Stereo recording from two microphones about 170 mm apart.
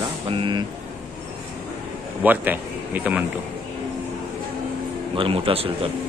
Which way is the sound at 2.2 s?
10° right (ahead or behind).